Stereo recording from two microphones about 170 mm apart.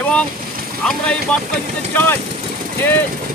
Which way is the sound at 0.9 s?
5° left (ahead or behind).